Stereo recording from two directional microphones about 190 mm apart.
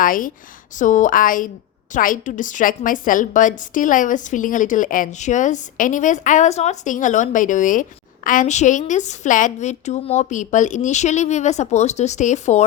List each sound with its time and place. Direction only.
0.0 s a woman's voice: 45° left (ahead or behind)